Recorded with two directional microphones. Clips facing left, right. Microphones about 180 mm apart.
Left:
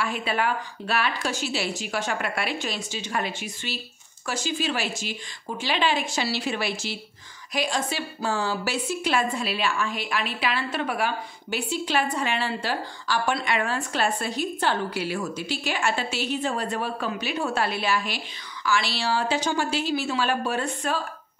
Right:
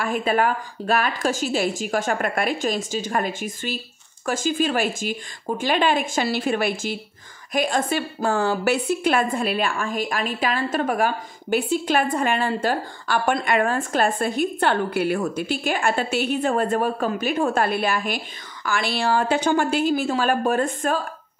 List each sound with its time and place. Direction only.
0.0 s a woman's voice: 45° right (ahead or behind)